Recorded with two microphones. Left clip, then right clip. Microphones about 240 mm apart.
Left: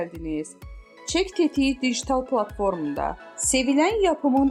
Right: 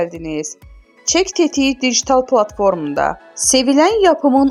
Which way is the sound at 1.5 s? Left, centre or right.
Right.